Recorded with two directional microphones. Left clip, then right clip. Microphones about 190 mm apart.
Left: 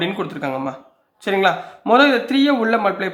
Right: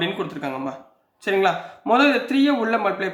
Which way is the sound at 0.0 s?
30° left (ahead or behind).